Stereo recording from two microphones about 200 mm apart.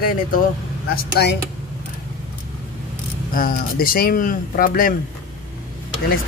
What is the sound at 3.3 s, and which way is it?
Speech, 45° left (ahead or behind).